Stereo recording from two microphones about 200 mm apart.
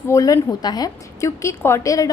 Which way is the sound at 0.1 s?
15° left (ahead or behind).